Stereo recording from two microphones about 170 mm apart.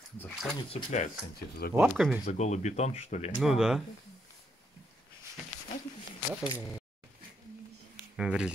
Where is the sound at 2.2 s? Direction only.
40° left (ahead or behind).